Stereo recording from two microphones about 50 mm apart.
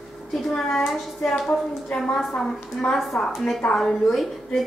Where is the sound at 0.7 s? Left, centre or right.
Centre.